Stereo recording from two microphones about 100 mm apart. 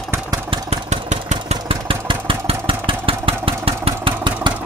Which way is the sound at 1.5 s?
65° right (ahead or behind).